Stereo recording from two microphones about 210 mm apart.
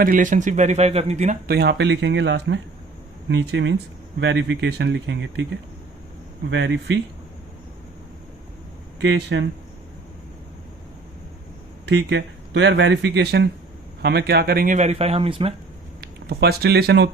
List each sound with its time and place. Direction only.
0.0 s speech: 40° right (ahead or behind)
1.5 s speech: 50° right (ahead or behind)
6.5 s speech: 60° right (ahead or behind)
9.0 s speech: 60° right (ahead or behind)
11.9 s speech: 55° right (ahead or behind); by 15.5 s 25° right (ahead or behind)
16.0 s speech: 50° right (ahead or behind)